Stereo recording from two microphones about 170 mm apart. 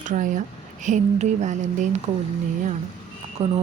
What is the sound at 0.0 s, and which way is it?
Speech, 50° right (ahead or behind).